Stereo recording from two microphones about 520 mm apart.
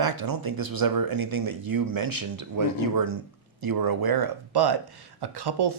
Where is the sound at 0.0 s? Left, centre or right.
Right.